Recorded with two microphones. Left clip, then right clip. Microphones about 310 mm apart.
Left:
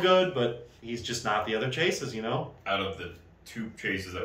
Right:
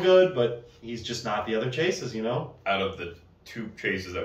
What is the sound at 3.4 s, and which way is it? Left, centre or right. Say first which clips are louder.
Speech: right 3 dB; centre.